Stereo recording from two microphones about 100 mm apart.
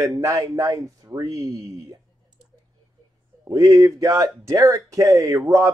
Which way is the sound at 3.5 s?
35° right (ahead or behind).